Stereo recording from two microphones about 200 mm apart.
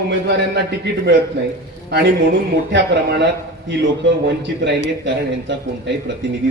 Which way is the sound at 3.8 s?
60° right (ahead or behind).